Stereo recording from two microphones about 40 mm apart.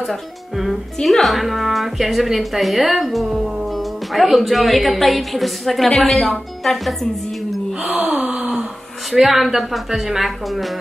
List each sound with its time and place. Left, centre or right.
1.0 s speech: centre
7.8 s gasp: right
9.1 s speech: centre